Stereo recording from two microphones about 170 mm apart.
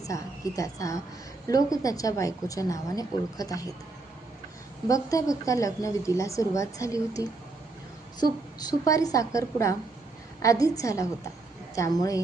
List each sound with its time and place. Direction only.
0.0 s a woman's voice: 20° left (ahead or behind)
4.9 s a woman's voice: 20° left (ahead or behind)
8.2 s a woman's voice: 25° left (ahead or behind)